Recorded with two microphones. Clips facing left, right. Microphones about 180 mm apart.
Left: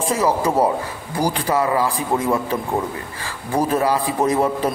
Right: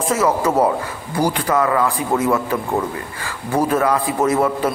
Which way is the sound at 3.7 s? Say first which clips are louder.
Even; 30° left (ahead or behind).